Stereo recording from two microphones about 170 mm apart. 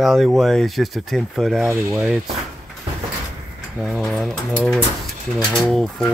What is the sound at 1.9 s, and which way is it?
Speech, centre (ahead or behind).